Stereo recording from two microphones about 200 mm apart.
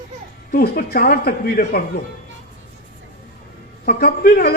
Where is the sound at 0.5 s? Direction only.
50° left (ahead or behind).